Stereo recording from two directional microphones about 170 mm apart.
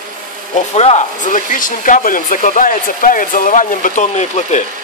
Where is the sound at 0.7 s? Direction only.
40° left (ahead or behind).